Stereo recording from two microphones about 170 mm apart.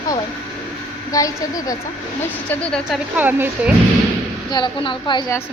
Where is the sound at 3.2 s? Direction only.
10° right (ahead or behind).